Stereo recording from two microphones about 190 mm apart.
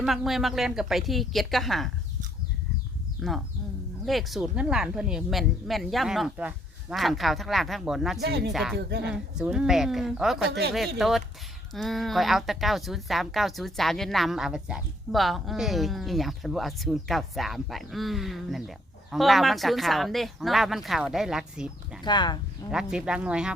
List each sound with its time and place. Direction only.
0.0 s speech: centre (ahead or behind)
3.2 s speech: centre (ahead or behind)
8.2 s speech: 60° right (ahead or behind)
8.5 s speech: centre (ahead or behind)
8.9 s speech: 65° right (ahead or behind)
9.4 s speech: 5° right (ahead or behind)
22.0 s speech: 25° left (ahead or behind)
22.7 s speech: 5° right (ahead or behind)